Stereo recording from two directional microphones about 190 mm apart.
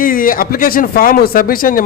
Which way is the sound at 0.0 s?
45° left (ahead or behind).